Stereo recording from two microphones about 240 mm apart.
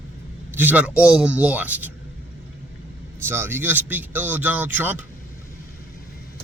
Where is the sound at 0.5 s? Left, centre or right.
Centre.